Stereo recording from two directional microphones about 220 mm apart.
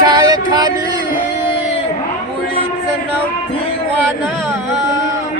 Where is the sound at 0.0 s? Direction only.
20° right (ahead or behind).